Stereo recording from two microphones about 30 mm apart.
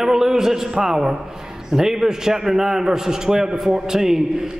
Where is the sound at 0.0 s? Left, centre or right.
Centre.